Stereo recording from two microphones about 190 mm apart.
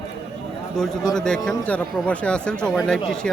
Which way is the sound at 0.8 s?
5° left (ahead or behind).